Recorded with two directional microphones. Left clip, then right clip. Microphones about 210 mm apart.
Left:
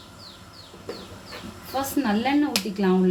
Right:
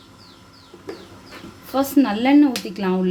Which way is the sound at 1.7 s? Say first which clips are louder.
Right 6 dB; 50° right (ahead or behind).